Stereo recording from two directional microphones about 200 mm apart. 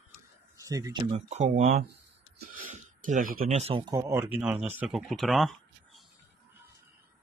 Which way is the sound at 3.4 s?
30° right (ahead or behind).